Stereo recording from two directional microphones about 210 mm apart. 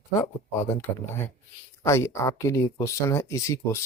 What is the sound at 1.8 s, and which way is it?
Speech, 15° left (ahead or behind).